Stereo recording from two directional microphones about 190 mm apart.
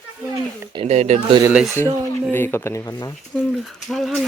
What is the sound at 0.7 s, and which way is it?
Speech, 35° right (ahead or behind).